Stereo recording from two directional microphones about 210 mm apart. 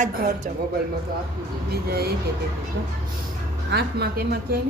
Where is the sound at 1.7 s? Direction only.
50° right (ahead or behind).